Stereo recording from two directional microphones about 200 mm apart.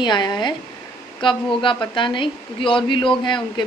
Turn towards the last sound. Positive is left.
turn(degrees=25)  # may be behind; listen again after turning